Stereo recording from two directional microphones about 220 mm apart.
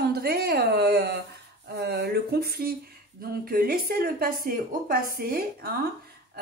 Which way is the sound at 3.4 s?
40° right (ahead or behind).